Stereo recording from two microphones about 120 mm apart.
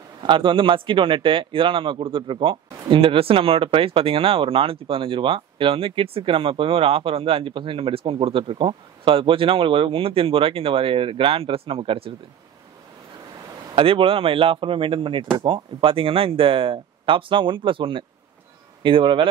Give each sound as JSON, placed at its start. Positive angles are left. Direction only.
{"t": 0.2, "sound": "a man's voice", "side_deg": -45}
{"t": 13.7, "sound": "a man's voice", "side_deg": -50}